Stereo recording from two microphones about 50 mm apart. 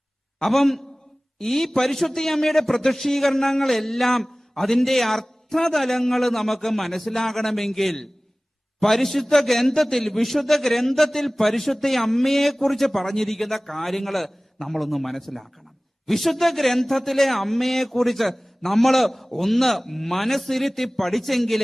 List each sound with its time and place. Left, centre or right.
0.4 s a man's voice: centre